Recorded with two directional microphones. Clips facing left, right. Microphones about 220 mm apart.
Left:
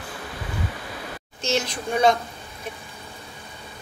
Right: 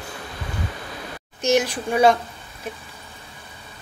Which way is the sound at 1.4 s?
15° right (ahead or behind).